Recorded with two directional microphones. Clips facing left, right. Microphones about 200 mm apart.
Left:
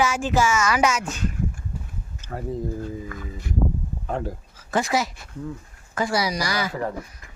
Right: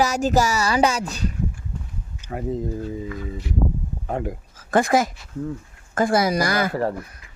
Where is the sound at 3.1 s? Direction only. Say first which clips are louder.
Right 4 dB; 50° left (ahead or behind).